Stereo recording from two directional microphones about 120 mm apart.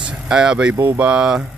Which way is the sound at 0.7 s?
20° right (ahead or behind).